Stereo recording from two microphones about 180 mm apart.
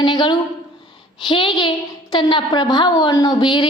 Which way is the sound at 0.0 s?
25° left (ahead or behind).